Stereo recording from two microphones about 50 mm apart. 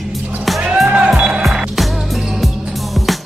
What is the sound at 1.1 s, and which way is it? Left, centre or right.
Music, centre.